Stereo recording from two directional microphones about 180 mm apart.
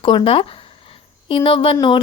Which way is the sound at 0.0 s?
30° left (ahead or behind).